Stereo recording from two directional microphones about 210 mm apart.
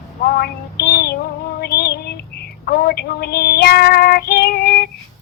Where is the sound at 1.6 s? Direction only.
50° left (ahead or behind).